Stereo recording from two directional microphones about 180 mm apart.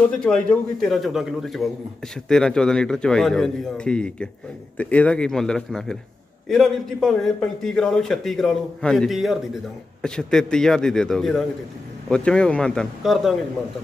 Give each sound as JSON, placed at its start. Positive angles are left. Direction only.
{"t": 0.0, "sound": "a man's voice", "side_deg": 5}